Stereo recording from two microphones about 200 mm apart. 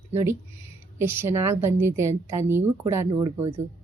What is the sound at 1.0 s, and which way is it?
A woman's voice, 10° right (ahead or behind).